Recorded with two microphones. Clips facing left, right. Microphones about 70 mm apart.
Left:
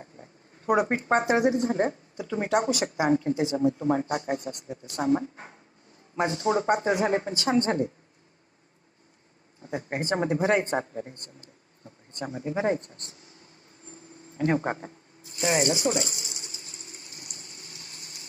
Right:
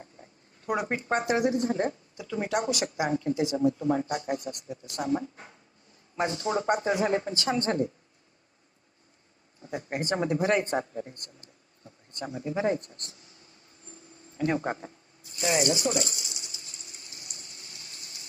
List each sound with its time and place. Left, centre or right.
0.0 s speech: left
9.6 s speech: left
16.1 s a sound: left